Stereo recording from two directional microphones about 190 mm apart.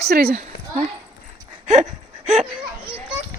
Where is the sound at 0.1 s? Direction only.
55° right (ahead or behind).